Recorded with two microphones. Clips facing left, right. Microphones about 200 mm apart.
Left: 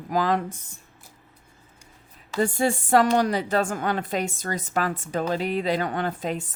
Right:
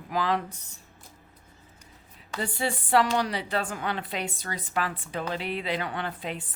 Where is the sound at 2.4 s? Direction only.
45° left (ahead or behind).